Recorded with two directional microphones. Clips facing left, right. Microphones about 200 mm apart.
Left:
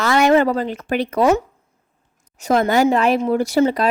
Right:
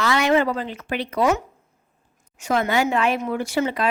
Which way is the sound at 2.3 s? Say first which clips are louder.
Left 5 dB; 40° left (ahead or behind).